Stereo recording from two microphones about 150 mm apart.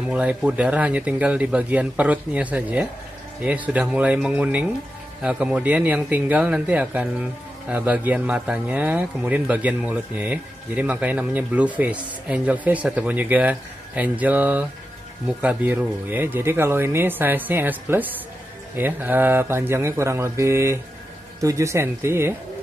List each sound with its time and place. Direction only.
0.1 s speech: 5° right (ahead or behind)